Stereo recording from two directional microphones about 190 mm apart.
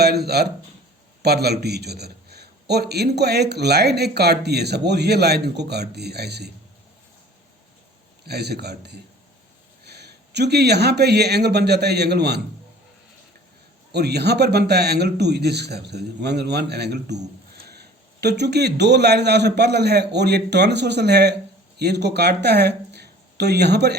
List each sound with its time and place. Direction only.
0.0 s a man's voice: 60° right (ahead or behind)
8.3 s a man's voice: 60° right (ahead or behind)
13.9 s a man's voice: 60° right (ahead or behind)